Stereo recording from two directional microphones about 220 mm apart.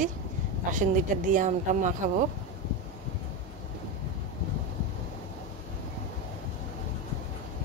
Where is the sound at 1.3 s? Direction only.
35° right (ahead or behind).